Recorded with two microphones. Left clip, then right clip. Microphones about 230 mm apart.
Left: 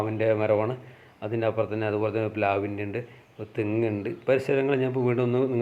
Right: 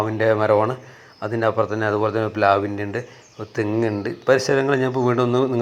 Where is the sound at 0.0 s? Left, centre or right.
Centre.